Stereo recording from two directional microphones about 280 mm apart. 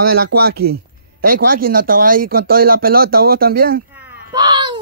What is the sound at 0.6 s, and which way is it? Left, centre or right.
Speech, right.